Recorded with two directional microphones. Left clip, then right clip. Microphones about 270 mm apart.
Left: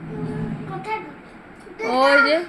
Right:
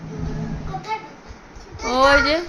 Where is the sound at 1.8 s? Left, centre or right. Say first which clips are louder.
Even; centre.